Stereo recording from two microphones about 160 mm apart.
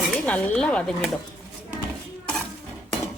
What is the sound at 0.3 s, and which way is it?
Speech, 10° left (ahead or behind).